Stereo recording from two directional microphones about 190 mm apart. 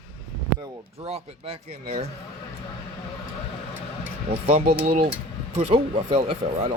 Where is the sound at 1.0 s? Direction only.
35° right (ahead or behind).